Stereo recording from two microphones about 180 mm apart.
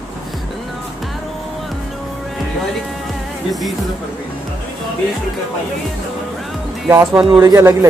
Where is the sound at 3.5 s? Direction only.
Centre (ahead or behind).